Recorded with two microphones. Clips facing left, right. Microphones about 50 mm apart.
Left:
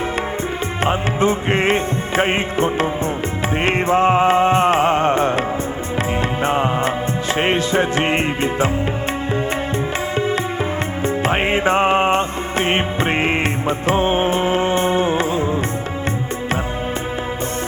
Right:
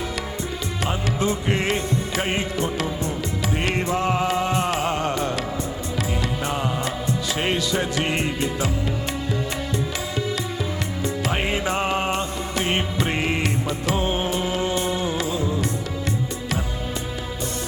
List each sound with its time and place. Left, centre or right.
0.9 s music: left
6.4 s music: left
11.0 s music: left